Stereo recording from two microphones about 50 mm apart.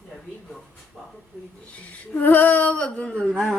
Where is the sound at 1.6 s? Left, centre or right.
Left.